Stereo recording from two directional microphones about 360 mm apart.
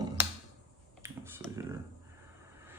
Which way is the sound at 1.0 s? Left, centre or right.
Centre.